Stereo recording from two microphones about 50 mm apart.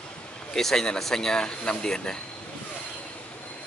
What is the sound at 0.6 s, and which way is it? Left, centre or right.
Speech, centre.